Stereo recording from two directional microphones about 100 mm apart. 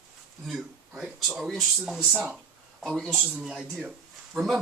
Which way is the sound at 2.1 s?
15° right (ahead or behind).